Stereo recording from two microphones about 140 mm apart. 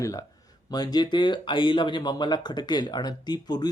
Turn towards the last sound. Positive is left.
turn(degrees=30)  # may be behind; listen again after turning